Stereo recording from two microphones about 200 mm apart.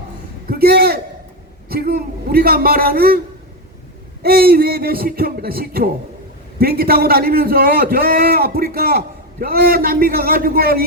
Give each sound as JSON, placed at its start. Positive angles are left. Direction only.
{"t": 0.4, "sound": "a sound", "side_deg": -50}
{"t": 1.7, "sound": "a man's voice", "side_deg": -50}
{"t": 4.2, "sound": "a man's voice", "side_deg": -50}